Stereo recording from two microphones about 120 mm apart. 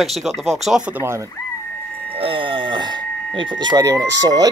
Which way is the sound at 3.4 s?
40° right (ahead or behind).